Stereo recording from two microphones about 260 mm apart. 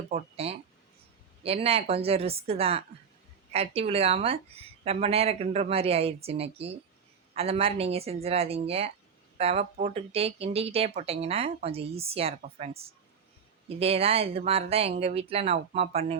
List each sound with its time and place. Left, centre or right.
0.1 s speech: right